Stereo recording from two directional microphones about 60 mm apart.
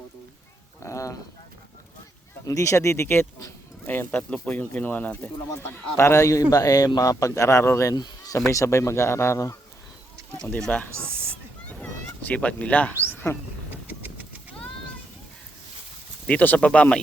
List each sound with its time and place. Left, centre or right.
0.8 s a sound: left
2.5 s speech: left
3.8 s speech: left
4.2 s speech: left
5.6 s speech: left
6.5 s a man's voice: left
7.9 s speech: left
11.1 s a sound: right
11.8 s cat: left
13.3 s speech: left
16.2 s speech: left